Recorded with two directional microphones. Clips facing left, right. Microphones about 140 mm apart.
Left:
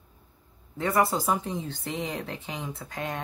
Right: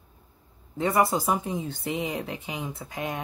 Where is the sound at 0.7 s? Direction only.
20° right (ahead or behind).